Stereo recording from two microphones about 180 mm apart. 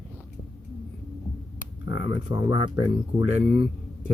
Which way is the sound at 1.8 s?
90° left.